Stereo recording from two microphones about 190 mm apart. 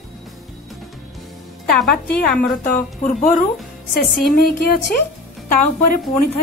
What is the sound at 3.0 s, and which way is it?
Speech, 45° left (ahead or behind).